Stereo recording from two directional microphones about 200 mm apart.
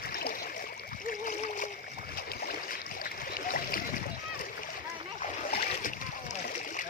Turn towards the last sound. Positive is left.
turn(degrees=45)  # may be behind; listen again after turning